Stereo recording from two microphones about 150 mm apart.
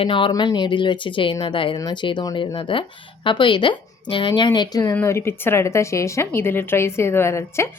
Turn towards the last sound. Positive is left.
turn(degrees=20)  # may be behind; listen again after turning